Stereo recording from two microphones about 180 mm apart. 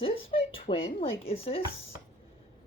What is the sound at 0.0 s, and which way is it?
Speech, 30° left (ahead or behind).